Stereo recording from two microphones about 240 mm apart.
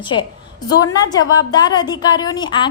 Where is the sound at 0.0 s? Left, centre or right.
Centre.